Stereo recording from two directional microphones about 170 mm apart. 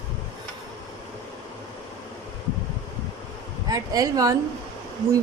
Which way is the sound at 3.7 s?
20° right (ahead or behind).